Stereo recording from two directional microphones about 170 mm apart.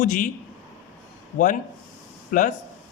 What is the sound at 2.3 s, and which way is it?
Speech, 50° left (ahead or behind).